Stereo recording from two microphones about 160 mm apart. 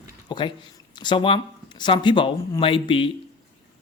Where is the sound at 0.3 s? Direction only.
30° left (ahead or behind).